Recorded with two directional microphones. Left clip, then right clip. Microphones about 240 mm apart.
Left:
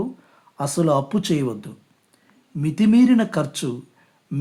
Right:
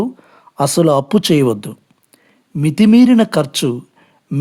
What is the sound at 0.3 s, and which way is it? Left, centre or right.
Speech, right.